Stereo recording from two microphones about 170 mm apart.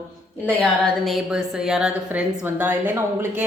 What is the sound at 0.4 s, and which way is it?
Speech, 5° left (ahead or behind).